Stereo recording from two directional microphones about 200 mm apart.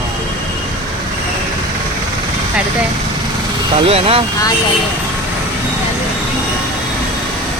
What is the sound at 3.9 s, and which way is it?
Speech, 30° right (ahead or behind).